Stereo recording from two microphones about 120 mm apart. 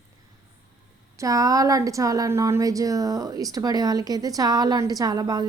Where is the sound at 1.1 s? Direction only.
30° right (ahead or behind).